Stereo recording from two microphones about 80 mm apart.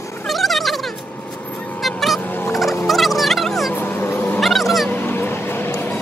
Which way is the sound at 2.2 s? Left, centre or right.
Left.